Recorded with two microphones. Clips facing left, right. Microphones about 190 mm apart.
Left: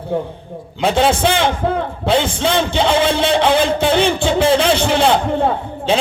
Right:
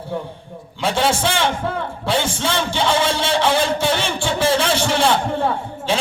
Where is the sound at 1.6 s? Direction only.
20° left (ahead or behind).